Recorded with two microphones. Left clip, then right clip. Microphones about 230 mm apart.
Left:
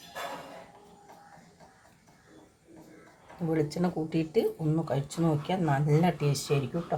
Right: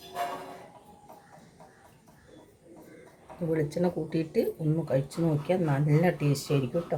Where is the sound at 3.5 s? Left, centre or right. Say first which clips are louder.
Right 1 dB; left.